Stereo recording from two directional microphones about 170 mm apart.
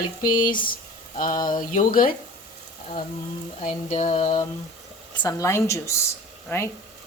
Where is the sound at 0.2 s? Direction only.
55° left (ahead or behind).